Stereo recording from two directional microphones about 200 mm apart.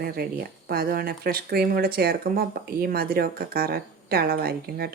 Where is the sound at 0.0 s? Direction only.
50° right (ahead or behind).